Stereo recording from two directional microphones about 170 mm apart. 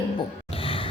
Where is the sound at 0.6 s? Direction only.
30° left (ahead or behind).